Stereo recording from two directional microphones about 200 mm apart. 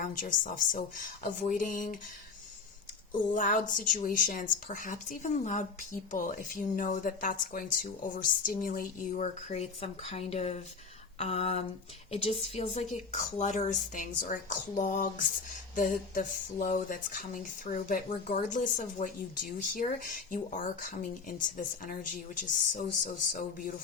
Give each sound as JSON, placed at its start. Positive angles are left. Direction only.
{"t": 0.0, "sound": "speech", "side_deg": 40}
{"t": 3.3, "sound": "speech", "side_deg": 40}